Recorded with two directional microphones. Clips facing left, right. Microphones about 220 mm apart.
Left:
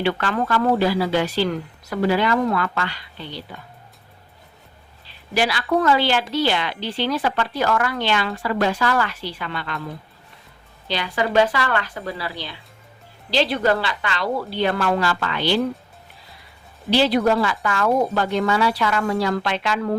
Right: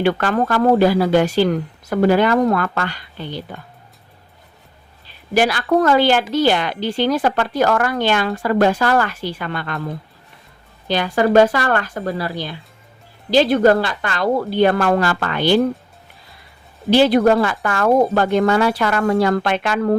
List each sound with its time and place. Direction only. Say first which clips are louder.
0.0 s a woman's voice: right 5 dB; 45° right (ahead or behind)
5.3 s a woman's voice: right 5 dB; 50° right (ahead or behind)
16.9 s a woman's voice: right 5 dB; 50° right (ahead or behind)